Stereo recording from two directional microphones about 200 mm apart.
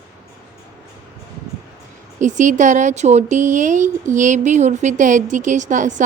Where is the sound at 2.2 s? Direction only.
40° right (ahead or behind).